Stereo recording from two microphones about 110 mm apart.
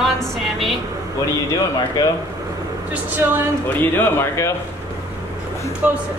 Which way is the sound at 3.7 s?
25° left (ahead or behind).